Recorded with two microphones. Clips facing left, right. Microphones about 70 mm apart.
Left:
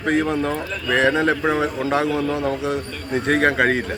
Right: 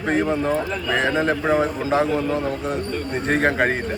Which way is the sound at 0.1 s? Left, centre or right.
Left.